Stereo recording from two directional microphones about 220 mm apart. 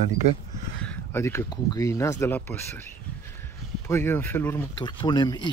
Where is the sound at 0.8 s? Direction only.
10° left (ahead or behind).